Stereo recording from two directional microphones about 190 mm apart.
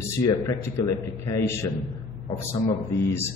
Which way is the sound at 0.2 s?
15° left (ahead or behind).